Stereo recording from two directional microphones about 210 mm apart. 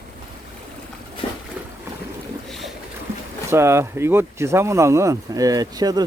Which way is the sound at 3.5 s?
10° right (ahead or behind).